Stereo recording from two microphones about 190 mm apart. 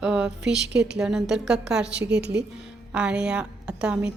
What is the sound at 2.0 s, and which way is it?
Speech, 60° right (ahead or behind).